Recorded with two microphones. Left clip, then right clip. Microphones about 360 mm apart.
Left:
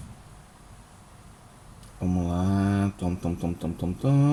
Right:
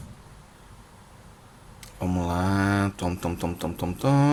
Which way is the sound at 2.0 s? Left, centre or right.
Right.